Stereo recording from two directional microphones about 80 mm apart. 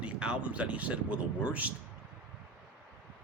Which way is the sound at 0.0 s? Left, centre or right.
Centre.